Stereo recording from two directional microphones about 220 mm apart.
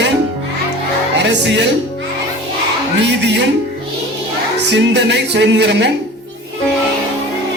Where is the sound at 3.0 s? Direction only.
50° right (ahead or behind).